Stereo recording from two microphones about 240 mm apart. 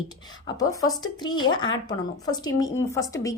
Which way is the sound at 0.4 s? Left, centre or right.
Centre.